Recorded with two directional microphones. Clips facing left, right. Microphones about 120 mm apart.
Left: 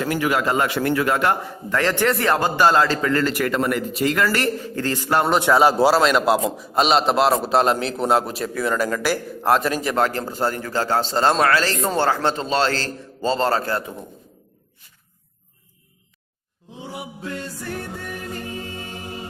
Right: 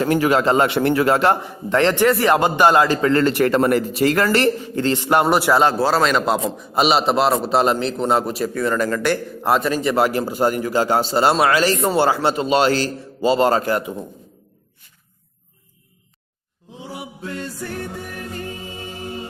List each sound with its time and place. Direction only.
0.0 s a man's voice: 30° right (ahead or behind); by 3.0 s 15° right (ahead or behind)
3.0 s speech: 25° right (ahead or behind)
4.7 s a man's voice: 20° right (ahead or behind)
5.2 s a man's voice: 5° right (ahead or behind)
10.0 s a man's voice: 10° right (ahead or behind)